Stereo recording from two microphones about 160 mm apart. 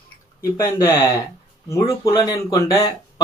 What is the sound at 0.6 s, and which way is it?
Speech, 20° left (ahead or behind).